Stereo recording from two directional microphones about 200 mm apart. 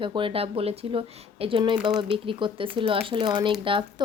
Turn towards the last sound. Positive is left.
turn(degrees=-25)  # may be behind; listen again after turning